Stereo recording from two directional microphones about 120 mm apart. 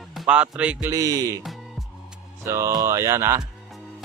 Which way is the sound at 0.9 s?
30° right (ahead or behind).